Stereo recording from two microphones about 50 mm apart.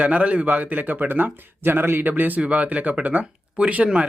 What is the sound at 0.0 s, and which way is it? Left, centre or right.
A man's voice, right.